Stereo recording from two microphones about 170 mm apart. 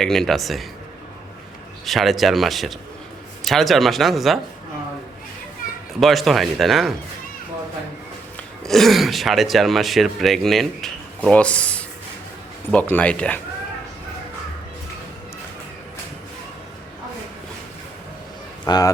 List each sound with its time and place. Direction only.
0.0 s speech: centre (ahead or behind)
1.8 s speech: centre (ahead or behind)
6.0 s speech: centre (ahead or behind)
8.6 s speech: centre (ahead or behind)
18.6 s a man's voice: 20° left (ahead or behind)